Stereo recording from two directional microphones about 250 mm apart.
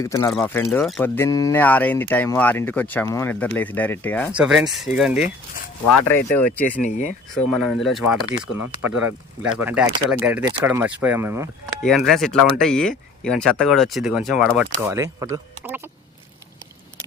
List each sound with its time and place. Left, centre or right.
0.0 s speech: centre
4.3 s speech: centre
6.3 s speech: centre
6.8 s speech: left
7.5 s speech: centre
11.8 s speech: centre